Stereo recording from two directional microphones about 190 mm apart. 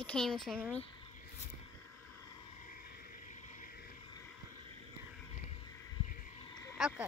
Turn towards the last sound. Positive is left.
turn(degrees=0)  # may be behind; listen again after turning